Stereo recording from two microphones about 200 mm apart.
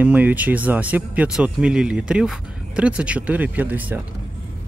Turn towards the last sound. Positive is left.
turn(degrees=-10)  # may be behind; listen again after turning